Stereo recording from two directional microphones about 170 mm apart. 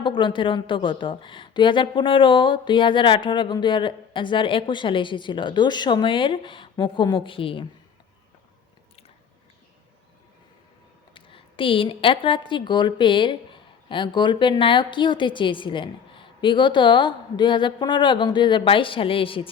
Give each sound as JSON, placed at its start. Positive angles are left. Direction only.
{"t": 0.0, "sound": "a woman's voice", "side_deg": 30}
{"t": 11.1, "sound": "a woman's voice", "side_deg": 30}